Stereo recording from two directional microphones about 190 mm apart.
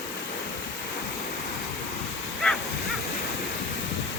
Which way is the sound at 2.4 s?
5° left (ahead or behind).